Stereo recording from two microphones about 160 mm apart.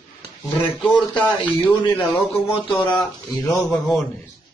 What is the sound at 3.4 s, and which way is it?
Speech, 20° left (ahead or behind).